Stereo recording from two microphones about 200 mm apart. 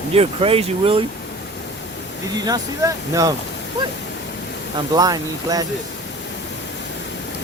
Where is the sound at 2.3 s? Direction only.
20° right (ahead or behind).